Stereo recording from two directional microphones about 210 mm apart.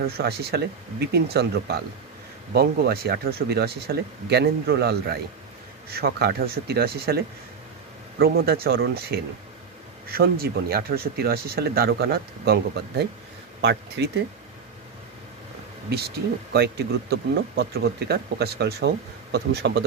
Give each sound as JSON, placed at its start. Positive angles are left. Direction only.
{"t": 0.0, "sound": "speech", "side_deg": -50}
{"t": 16.5, "sound": "speech", "side_deg": -50}